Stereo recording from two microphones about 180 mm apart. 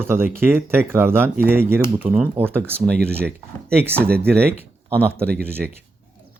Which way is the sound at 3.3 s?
65° right (ahead or behind).